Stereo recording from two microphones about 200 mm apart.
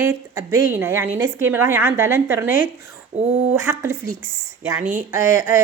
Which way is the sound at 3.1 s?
35° right (ahead or behind).